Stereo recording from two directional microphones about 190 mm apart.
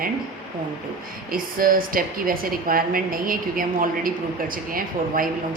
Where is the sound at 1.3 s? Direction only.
50° right (ahead or behind).